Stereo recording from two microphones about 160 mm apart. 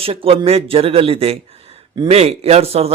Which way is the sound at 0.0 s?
35° right (ahead or behind).